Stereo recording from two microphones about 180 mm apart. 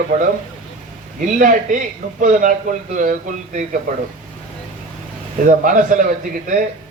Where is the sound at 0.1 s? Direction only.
50° right (ahead or behind).